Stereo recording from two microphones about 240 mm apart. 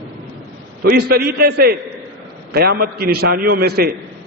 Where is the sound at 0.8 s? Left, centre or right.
Right.